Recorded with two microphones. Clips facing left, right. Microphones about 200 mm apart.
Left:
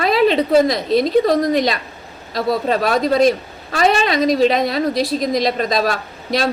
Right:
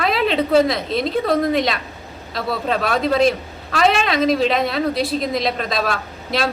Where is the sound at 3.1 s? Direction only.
Centre (ahead or behind).